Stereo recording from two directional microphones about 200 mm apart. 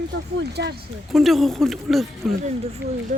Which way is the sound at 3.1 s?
35° right (ahead or behind).